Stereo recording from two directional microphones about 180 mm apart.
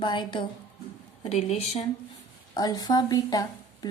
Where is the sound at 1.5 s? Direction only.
35° left (ahead or behind).